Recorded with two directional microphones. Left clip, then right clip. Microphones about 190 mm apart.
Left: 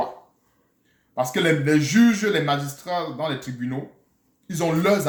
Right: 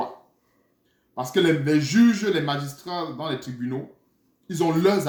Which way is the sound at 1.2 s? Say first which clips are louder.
Left 1 dB; 10° left (ahead or behind).